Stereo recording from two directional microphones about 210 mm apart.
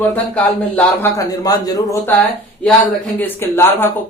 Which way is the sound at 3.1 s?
10° left (ahead or behind).